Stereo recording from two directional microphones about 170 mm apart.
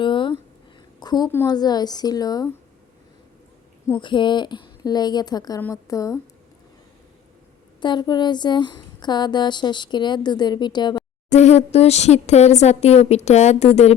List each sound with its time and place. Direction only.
0.0 s a sound: 30° left (ahead or behind)
1.3 s a woman's voice: 15° left (ahead or behind)
1.5 s speech: 25° left (ahead or behind)
4.0 s speech: 30° left (ahead or behind)
7.8 s speech: 25° left (ahead or behind)
11.3 s speech: 40° left (ahead or behind)